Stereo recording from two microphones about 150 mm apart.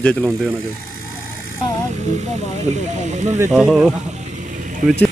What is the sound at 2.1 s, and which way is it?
Speech, 50° right (ahead or behind).